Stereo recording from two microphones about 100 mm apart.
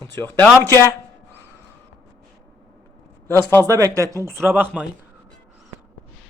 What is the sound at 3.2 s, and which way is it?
Speech, 20° left (ahead or behind).